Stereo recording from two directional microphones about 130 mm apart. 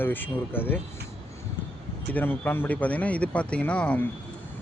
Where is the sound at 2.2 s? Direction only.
15° left (ahead or behind).